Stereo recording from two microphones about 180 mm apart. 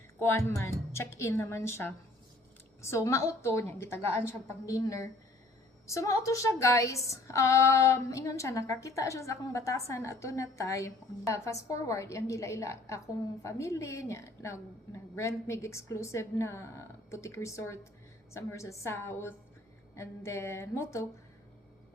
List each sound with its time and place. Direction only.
0.2 s a woman's voice: 15° left (ahead or behind)